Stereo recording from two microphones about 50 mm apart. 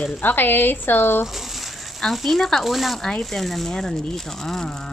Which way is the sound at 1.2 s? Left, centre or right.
Centre.